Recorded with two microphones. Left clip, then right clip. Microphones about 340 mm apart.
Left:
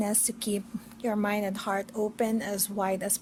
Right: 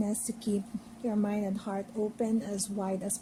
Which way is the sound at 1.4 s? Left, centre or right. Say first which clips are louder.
Left 6 dB; left.